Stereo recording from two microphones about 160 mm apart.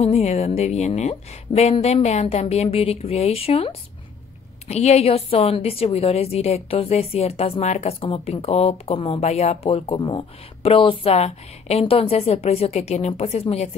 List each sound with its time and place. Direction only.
0.0 s a woman's voice: 40° left (ahead or behind)